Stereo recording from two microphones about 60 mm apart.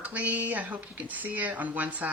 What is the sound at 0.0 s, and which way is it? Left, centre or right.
Speech, right.